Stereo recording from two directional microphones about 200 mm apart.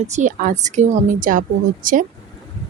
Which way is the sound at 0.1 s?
40° right (ahead or behind).